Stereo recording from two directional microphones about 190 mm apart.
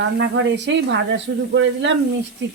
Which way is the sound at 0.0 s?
75° right (ahead or behind).